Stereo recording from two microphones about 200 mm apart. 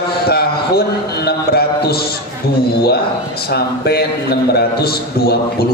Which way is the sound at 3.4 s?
50° left (ahead or behind).